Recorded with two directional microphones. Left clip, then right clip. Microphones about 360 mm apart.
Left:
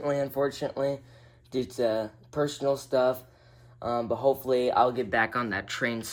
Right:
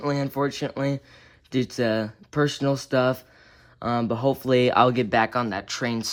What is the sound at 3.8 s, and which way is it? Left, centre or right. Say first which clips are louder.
Speech: right 2 dB; right.